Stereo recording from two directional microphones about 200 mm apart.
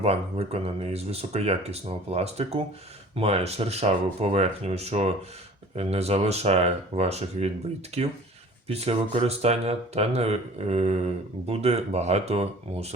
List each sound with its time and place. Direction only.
0.0 s speech: 30° right (ahead or behind)